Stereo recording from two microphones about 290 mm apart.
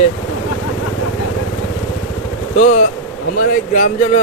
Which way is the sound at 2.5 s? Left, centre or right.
Left.